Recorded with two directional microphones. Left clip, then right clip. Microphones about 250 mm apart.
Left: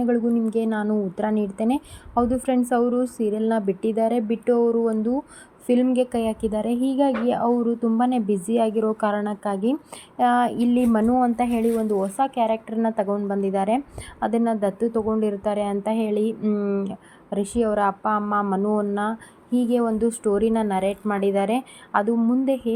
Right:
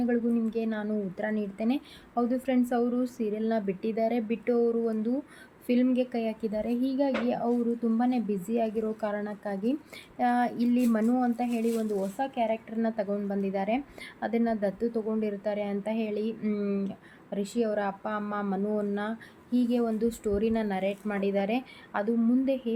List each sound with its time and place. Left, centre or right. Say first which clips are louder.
0.0 s a woman's voice: left 6 dB; centre